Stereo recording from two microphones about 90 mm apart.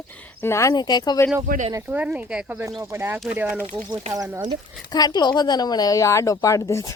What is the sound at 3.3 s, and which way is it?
Speech, 15° right (ahead or behind).